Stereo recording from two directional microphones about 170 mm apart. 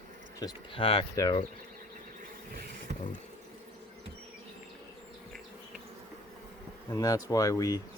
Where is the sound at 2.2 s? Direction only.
60° right (ahead or behind).